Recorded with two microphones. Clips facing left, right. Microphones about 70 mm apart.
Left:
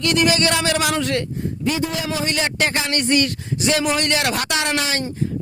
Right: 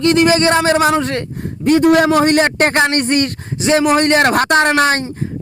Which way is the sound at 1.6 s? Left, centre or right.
Right.